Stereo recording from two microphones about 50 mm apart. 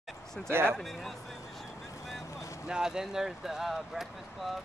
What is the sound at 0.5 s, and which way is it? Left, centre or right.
Speech, right.